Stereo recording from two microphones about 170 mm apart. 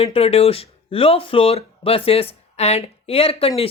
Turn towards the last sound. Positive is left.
turn(degrees=35)  # may be behind; listen again after turning